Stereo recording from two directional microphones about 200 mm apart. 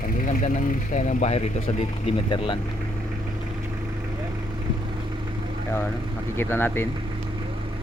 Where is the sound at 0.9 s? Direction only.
40° left (ahead or behind).